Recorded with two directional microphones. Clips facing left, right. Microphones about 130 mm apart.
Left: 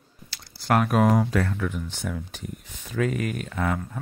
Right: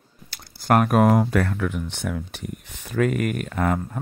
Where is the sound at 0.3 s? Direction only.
50° right (ahead or behind).